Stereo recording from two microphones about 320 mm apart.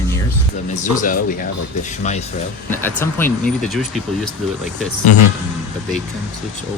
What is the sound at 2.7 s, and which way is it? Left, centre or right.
Speech, centre.